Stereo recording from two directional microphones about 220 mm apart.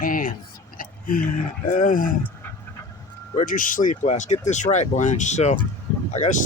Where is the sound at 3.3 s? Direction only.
35° left (ahead or behind).